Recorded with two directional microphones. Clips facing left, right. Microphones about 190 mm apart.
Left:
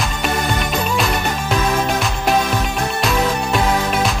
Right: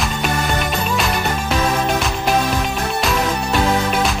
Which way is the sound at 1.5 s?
Centre (ahead or behind).